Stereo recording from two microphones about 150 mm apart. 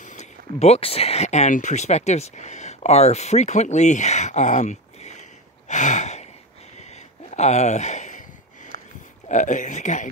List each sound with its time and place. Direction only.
0.0 s speech: 55° left (ahead or behind)
5.7 s a sound: 55° left (ahead or behind)
9.3 s speech: 55° left (ahead or behind)